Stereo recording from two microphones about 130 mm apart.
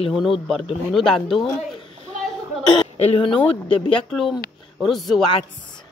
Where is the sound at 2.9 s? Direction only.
50° left (ahead or behind).